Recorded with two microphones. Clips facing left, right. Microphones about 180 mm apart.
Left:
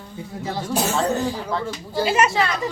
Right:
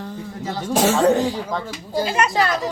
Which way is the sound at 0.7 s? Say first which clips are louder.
Right 6 dB; 90° right.